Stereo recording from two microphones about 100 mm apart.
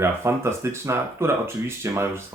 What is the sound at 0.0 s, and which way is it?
Speech, 25° right (ahead or behind).